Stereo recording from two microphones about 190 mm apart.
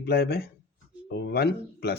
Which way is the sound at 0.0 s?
55° left (ahead or behind).